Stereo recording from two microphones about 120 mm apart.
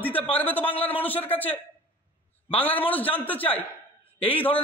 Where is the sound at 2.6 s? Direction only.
15° left (ahead or behind).